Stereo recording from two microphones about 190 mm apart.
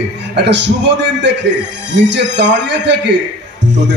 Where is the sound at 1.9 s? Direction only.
70° right (ahead or behind).